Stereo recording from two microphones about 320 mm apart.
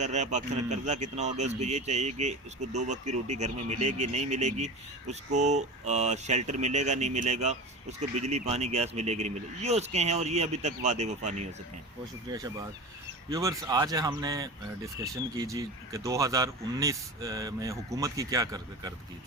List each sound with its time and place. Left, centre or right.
0.0 s speech: right